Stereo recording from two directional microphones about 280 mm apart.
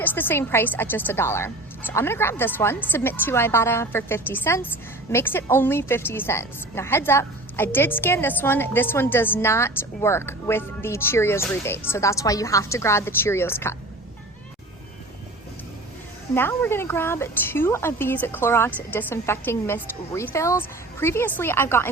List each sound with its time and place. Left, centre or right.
0.0 s a woman's voice: centre
16.3 s a woman's voice: centre